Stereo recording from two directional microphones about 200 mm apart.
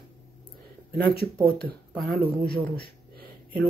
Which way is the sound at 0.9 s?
50° right (ahead or behind).